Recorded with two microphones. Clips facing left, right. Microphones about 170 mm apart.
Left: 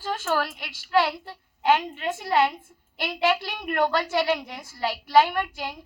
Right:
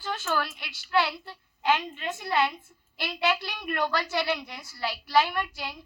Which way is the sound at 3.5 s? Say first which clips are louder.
Left 5 dB; 50° left (ahead or behind).